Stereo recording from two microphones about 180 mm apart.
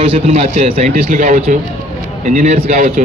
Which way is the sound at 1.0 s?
45° right (ahead or behind).